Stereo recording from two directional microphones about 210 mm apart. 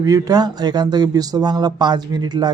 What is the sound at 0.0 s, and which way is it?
Speech, 20° right (ahead or behind).